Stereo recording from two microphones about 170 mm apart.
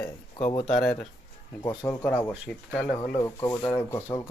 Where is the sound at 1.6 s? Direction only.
25° left (ahead or behind).